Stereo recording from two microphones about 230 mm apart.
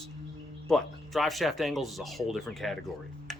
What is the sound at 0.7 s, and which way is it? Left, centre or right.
Speech, centre.